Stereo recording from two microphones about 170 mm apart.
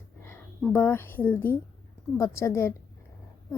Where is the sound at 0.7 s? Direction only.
15° left (ahead or behind).